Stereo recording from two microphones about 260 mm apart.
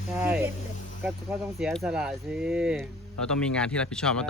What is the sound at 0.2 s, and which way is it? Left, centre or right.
Speech, centre.